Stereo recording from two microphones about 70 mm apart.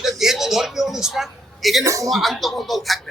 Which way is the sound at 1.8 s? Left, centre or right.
Right.